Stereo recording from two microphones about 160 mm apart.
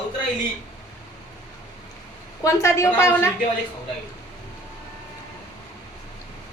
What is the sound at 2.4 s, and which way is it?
Speech, 20° left (ahead or behind).